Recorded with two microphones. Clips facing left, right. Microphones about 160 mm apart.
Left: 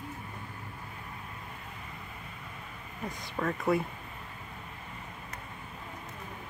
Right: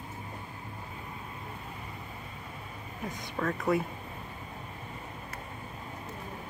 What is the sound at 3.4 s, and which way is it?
Speech, centre (ahead or behind).